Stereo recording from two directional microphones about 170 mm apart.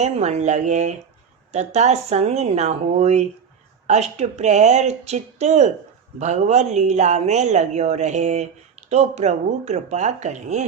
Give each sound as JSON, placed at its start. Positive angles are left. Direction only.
{"t": 0.0, "sound": "speech", "side_deg": -40}